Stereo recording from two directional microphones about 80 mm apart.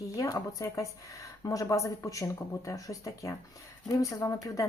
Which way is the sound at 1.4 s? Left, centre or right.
Left.